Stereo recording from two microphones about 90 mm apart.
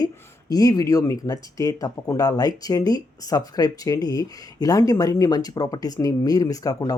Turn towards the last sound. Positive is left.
turn(degrees=45)  # may be behind; listen again after turning